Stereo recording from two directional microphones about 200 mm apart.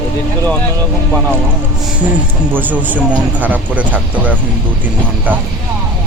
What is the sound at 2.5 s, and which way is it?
Speech, 10° right (ahead or behind).